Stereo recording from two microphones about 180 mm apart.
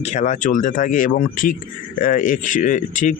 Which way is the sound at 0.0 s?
40° left (ahead or behind).